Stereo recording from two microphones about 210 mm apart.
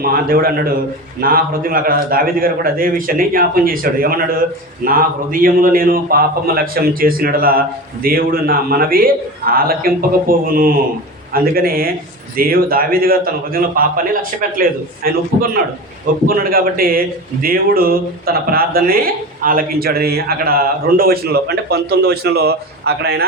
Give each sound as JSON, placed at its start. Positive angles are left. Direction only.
{"t": 0.0, "sound": "a man's voice", "side_deg": -45}